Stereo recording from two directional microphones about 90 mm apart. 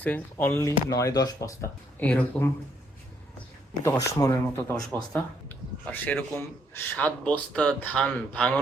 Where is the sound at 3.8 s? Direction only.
35° left (ahead or behind).